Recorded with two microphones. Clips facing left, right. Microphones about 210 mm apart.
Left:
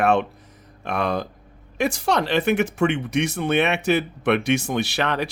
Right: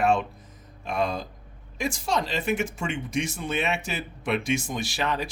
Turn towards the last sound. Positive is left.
turn(degrees=70)  # may be behind; listen again after turning